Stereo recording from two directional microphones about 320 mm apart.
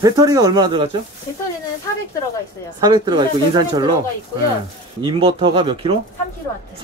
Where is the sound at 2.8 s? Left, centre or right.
Centre.